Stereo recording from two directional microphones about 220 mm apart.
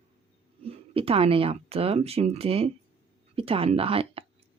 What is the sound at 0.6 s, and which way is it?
Speech, 25° right (ahead or behind).